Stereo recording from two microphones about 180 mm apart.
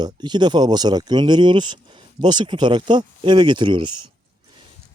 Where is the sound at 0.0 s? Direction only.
25° right (ahead or behind).